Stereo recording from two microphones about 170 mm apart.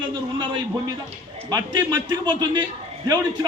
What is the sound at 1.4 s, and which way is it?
A man's voice, 25° right (ahead or behind).